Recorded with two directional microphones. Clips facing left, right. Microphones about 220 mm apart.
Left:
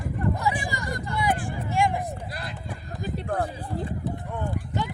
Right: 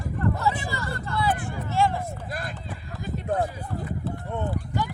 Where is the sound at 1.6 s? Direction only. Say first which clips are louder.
Right 1 dB; 15° left (ahead or behind).